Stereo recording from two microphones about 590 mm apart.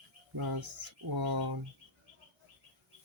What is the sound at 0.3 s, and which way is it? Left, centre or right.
Speech, right.